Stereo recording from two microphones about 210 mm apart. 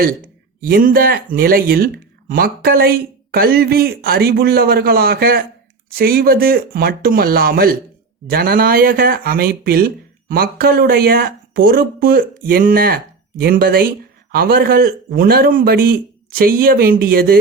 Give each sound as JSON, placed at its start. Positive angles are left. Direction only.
{"t": 0.6, "sound": "speech", "side_deg": -45}